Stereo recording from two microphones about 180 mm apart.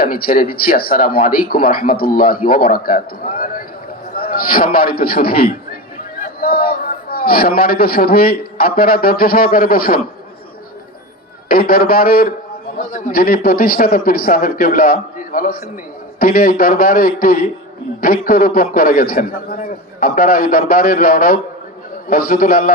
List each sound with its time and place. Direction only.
0.0 s a man's voice: 55° left (ahead or behind)
11.4 s a man's voice: 55° left (ahead or behind)